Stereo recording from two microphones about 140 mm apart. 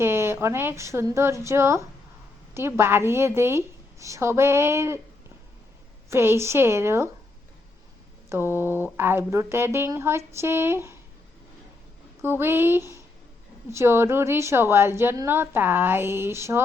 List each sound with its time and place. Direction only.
0.0 s a woman's voice: 15° right (ahead or behind)
6.1 s a woman's voice: 20° right (ahead or behind)
8.3 s a woman's voice: 15° right (ahead or behind)
12.2 s a woman's voice: 15° right (ahead or behind)